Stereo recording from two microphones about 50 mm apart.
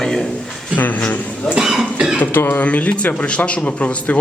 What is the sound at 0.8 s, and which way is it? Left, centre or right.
Speech, left.